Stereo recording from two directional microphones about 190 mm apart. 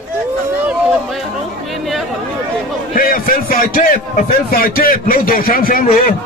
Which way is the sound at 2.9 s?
45° left (ahead or behind).